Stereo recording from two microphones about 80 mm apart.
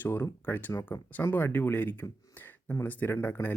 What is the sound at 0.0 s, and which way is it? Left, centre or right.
Speech, left.